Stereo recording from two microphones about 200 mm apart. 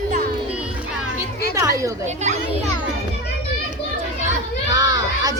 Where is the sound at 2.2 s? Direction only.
35° right (ahead or behind).